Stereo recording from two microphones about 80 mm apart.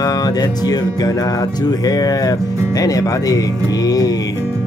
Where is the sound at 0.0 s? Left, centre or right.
Left.